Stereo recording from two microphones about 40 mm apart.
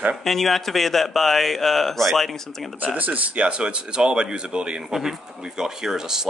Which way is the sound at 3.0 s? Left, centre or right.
Right.